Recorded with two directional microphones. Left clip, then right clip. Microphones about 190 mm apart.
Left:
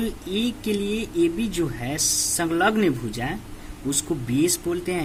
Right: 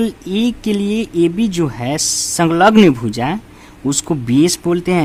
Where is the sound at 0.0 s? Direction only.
45° right (ahead or behind).